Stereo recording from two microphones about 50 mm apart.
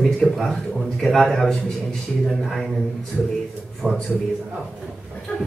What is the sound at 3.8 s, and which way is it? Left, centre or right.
Speech, centre.